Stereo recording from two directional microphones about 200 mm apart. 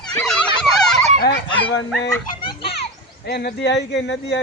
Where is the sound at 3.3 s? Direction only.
55° left (ahead or behind).